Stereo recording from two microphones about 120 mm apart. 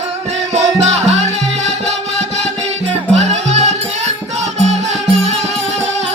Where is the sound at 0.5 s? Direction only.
65° right (ahead or behind).